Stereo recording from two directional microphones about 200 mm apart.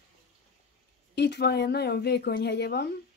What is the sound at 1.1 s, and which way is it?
A woman's voice, 55° left (ahead or behind).